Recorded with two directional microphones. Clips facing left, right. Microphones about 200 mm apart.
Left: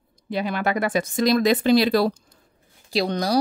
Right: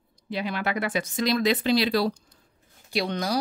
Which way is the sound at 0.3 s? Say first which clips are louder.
Left 4 dB; 50° left (ahead or behind).